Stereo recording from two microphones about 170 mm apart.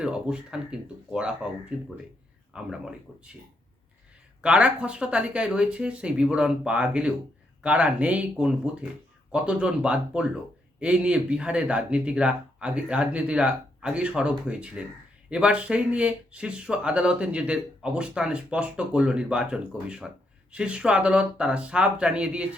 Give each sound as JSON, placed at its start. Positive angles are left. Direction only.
{"t": 0.0, "sound": "speech", "side_deg": -5}
{"t": 2.5, "sound": "speech", "side_deg": -5}
{"t": 4.4, "sound": "speech", "side_deg": -5}